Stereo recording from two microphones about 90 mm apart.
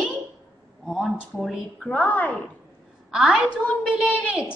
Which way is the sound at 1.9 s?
15° left (ahead or behind).